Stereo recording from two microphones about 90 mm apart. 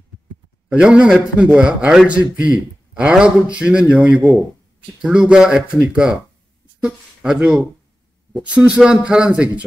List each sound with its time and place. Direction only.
0.7 s a man's voice: 10° right (ahead or behind)
6.8 s a man's voice: 5° right (ahead or behind)